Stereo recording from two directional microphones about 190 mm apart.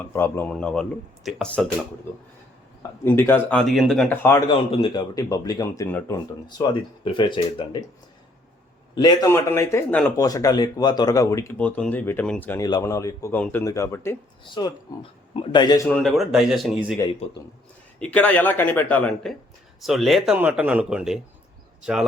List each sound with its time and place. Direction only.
0.0 s speech: 10° left (ahead or behind)
3.0 s speech: 10° left (ahead or behind)
4.4 s speech: 25° left (ahead or behind)
6.6 s speech: 25° left (ahead or behind)
9.0 s speech: 20° left (ahead or behind)
14.4 s speech: 25° left (ahead or behind)
15.9 s speech: centre (ahead or behind)
18.0 s speech: 5° left (ahead or behind)